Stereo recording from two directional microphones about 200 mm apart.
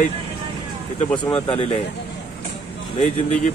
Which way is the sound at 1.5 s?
30° left (ahead or behind).